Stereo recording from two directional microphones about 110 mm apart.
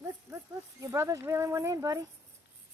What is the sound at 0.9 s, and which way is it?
Speech, 25° right (ahead or behind).